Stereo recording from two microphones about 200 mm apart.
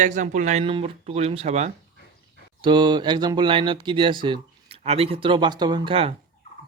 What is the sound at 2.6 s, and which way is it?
Speech, 20° right (ahead or behind).